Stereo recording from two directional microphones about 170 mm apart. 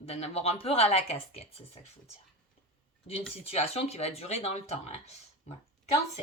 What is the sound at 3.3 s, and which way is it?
Speech, 35° left (ahead or behind).